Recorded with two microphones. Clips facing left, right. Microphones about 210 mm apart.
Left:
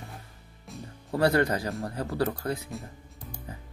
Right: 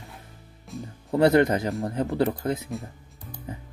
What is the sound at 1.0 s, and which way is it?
Speech, 20° right (ahead or behind).